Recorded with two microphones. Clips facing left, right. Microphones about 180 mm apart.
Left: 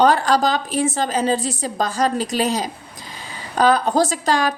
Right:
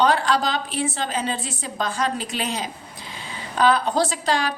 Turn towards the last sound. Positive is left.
turn(degrees=45)  # may be behind; listen again after turning